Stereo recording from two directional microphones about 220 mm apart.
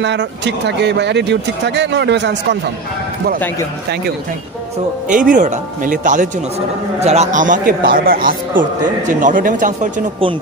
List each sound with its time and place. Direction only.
0.0 s speech: 50° right (ahead or behind)
5.1 s speech: 35° right (ahead or behind)